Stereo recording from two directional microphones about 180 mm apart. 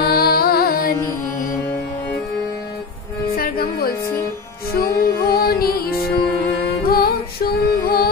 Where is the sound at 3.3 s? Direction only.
55° left (ahead or behind).